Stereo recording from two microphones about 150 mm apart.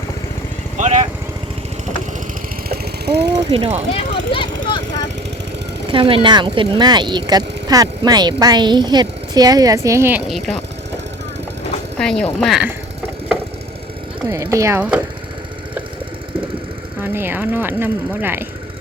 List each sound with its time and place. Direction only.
0.8 s speech: 50° right (ahead or behind)
2.6 s vehicle: 90° right
3.3 s speech: 45° right (ahead or behind)
4.4 s vehicle: 30° left (ahead or behind)
5.9 s speech: 35° right (ahead or behind); by 10.2 s 15° right (ahead or behind)
10.2 s speech: centre (ahead or behind)
11.9 s speech: 5° left (ahead or behind)
14.3 s speech: 20° right (ahead or behind)
17.0 s speech: 15° right (ahead or behind)